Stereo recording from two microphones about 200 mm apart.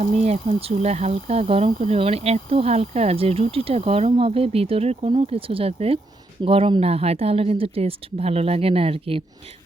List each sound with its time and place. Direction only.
0.0 s speech: 30° right (ahead or behind)